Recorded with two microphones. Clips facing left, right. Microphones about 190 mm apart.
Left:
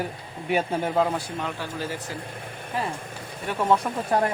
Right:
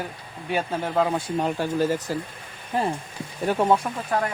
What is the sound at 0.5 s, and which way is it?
Speech, centre (ahead or behind).